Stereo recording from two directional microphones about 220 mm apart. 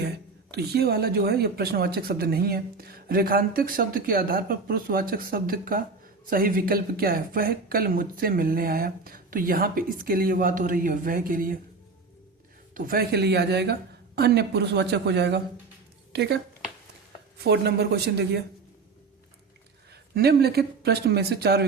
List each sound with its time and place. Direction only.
0.5 s a woman's voice: 45° right (ahead or behind)
12.7 s a woman's voice: 40° right (ahead or behind)
17.4 s a woman's voice: 50° right (ahead or behind)
19.9 s speech: 45° right (ahead or behind)